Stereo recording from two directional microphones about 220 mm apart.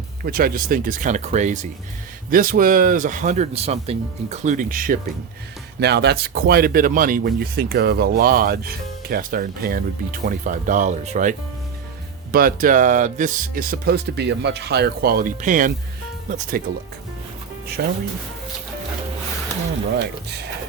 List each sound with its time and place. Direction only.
0.3 s speech: 40° right (ahead or behind)
5.8 s speech: 50° right (ahead or behind)
17.8 s speech: 45° right (ahead or behind)